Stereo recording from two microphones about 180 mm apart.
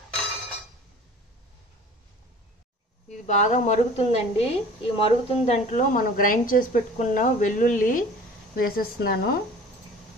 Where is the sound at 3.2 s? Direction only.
40° left (ahead or behind); by 9.3 s 60° left (ahead or behind).